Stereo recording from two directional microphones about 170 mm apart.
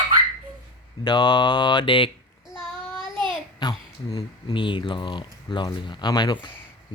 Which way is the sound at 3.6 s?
25° left (ahead or behind).